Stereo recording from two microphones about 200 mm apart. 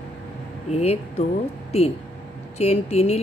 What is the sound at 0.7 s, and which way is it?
Speech, 35° left (ahead or behind).